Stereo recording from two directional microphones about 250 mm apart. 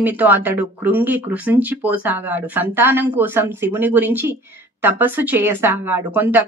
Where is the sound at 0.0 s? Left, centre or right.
Centre.